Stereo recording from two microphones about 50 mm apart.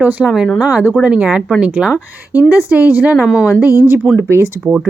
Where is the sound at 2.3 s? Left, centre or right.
Right.